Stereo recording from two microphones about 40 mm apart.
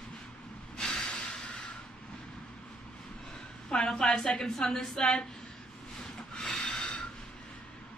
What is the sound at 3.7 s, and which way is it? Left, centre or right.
A woman's voice, centre.